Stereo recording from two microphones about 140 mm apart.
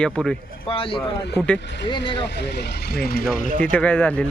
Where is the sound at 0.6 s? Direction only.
40° left (ahead or behind).